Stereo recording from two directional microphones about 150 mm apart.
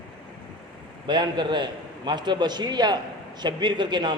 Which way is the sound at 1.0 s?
30° right (ahead or behind).